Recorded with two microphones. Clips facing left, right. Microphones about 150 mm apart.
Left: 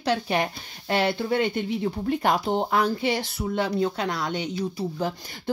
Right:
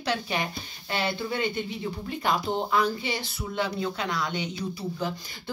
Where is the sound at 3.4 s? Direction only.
45° left (ahead or behind).